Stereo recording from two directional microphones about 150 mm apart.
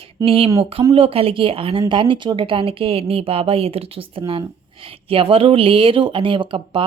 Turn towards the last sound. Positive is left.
turn(degrees=-35)  # may be behind; listen again after turning